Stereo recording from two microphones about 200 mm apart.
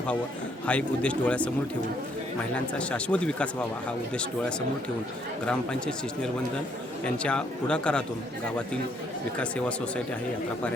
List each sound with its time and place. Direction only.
0.6 s speech: 5° left (ahead or behind)
2.7 s speech: 5° left (ahead or behind)
9.4 s speech: 5° left (ahead or behind)